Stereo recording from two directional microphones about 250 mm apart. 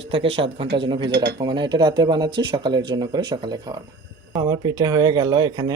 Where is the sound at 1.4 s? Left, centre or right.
Centre.